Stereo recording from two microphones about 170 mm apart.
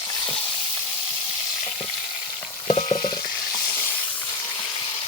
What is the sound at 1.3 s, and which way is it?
Frying, 30° left (ahead or behind).